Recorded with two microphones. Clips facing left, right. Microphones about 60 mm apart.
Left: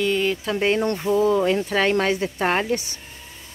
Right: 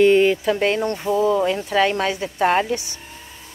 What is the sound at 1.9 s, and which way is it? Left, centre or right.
Speech, left.